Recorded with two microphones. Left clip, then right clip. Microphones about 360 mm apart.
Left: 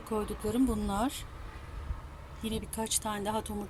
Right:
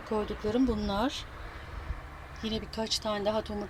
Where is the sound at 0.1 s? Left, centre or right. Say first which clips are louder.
Right 3 dB; centre.